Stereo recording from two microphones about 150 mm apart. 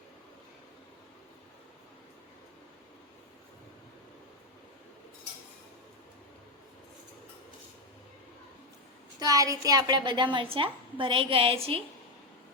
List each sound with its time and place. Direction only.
9.1 s a woman's voice: 25° right (ahead or behind)